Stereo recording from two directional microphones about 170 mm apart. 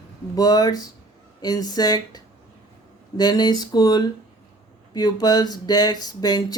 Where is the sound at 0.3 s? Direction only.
20° left (ahead or behind).